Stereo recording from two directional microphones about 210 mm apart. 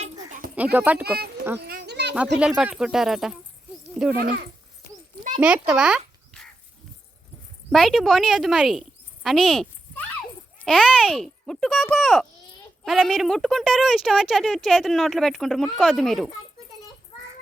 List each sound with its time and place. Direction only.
0.0 s a sound: 40° right (ahead or behind)
0.5 s speech: 5° right (ahead or behind)
1.5 s a sound: 50° right (ahead or behind)
2.4 s a woman's voice: 5° right (ahead or behind)
4.2 s speech: 45° right (ahead or behind)
5.4 s speech: 5° right (ahead or behind)
7.7 s a woman's voice: centre (ahead or behind)
9.2 s a sound: centre (ahead or behind)
10.6 s a woman's voice: centre (ahead or behind)